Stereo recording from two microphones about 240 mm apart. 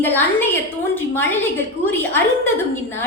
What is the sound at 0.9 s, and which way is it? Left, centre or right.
Speech, centre.